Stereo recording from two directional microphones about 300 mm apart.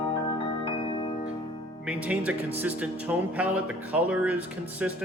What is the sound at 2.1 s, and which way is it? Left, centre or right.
Music, centre.